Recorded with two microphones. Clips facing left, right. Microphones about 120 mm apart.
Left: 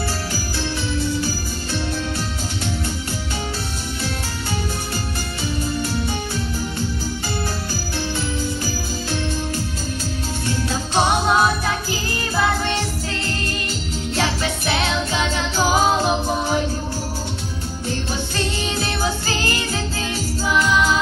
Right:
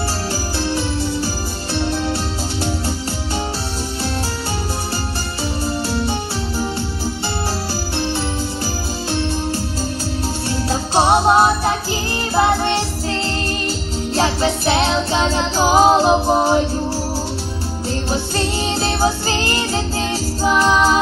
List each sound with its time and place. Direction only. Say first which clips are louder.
1.7 s music: right 5 dB; 35° right (ahead or behind)
5.6 s music: right 4 dB; 35° right (ahead or behind)
10.7 s music: right 5 dB; 35° right (ahead or behind)
14.1 s music: right 5 dB; 35° right (ahead or behind)
17.8 s jingle bell: right 4 dB; 35° right (ahead or behind)